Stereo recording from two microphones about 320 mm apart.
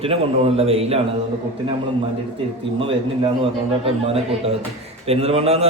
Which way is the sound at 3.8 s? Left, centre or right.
Centre.